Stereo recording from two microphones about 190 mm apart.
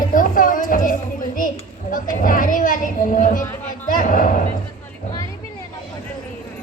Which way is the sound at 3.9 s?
45° left (ahead or behind).